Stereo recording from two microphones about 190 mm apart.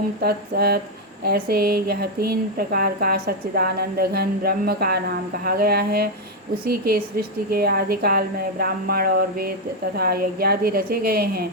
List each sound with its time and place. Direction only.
0.2 s speech: 55° right (ahead or behind)